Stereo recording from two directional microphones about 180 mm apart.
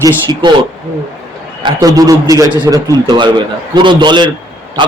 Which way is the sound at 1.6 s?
20° right (ahead or behind).